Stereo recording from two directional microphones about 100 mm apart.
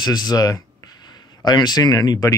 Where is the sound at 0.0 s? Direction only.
45° left (ahead or behind).